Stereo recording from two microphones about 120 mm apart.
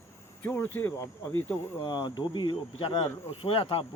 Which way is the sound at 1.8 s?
40° left (ahead or behind).